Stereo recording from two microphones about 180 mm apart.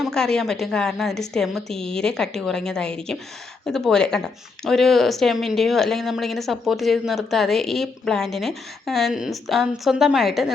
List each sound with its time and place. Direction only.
0.0 s speech: 5° left (ahead or behind)